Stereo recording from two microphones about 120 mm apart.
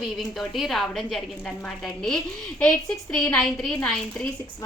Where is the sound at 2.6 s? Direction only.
10° left (ahead or behind).